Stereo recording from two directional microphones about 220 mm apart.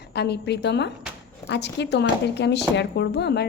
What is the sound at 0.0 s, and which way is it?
A woman's voice, 50° left (ahead or behind).